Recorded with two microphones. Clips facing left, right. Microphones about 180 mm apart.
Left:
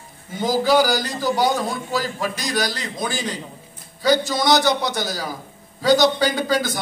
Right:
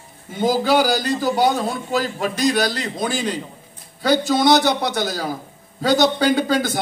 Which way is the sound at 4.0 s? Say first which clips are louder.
Right 2 dB; 60° right (ahead or behind).